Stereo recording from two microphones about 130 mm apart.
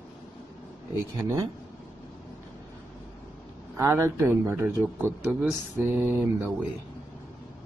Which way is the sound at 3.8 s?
20° right (ahead or behind).